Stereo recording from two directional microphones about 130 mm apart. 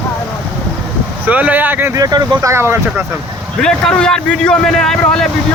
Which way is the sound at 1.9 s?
30° right (ahead or behind).